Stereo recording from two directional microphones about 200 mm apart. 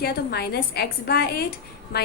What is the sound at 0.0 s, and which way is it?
A woman's voice, 55° left (ahead or behind).